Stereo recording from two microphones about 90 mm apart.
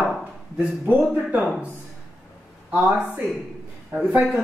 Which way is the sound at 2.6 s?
15° right (ahead or behind).